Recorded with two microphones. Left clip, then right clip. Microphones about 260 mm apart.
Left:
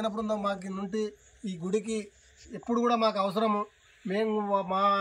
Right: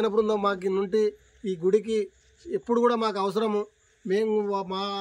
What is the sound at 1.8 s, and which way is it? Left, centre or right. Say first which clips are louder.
A man's voice: right 8 dB; centre.